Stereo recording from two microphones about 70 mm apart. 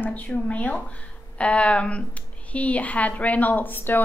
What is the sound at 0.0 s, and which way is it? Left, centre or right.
A woman's voice, left.